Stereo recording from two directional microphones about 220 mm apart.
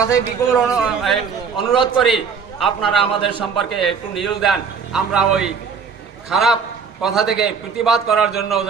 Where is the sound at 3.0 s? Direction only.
25° left (ahead or behind).